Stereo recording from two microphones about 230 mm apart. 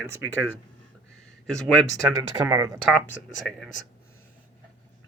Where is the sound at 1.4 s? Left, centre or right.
Centre.